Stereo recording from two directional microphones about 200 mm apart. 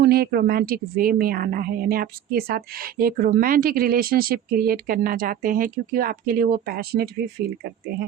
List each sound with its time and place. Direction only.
0.0 s a woman's voice: 50° right (ahead or behind)